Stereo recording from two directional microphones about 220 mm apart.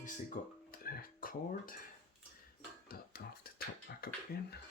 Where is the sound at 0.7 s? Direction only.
40° left (ahead or behind).